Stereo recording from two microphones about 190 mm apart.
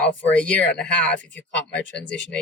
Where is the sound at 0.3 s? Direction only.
5° left (ahead or behind).